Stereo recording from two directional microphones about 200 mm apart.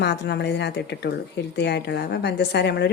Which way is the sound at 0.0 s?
55° left (ahead or behind).